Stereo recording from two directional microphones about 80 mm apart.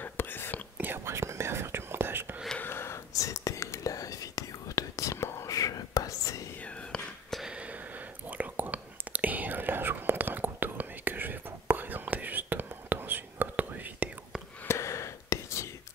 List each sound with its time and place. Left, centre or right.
0.0 s whispering: left
0.7 s whispering: right
2.6 s whispering: left
6.9 s whispering: centre
8.3 s whispering: right
14.7 s whispering: left